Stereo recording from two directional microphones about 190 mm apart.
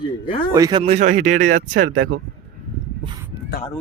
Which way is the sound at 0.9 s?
40° right (ahead or behind).